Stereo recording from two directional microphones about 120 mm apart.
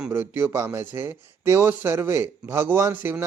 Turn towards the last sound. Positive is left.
turn(degrees=-15)  # may be behind; listen again after turning